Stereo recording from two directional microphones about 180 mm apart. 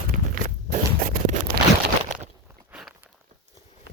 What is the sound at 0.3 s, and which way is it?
Scrape, 50° right (ahead or behind).